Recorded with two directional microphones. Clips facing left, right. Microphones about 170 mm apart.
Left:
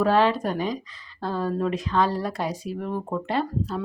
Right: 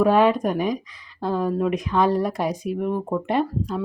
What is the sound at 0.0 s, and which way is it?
Speech, 15° right (ahead or behind).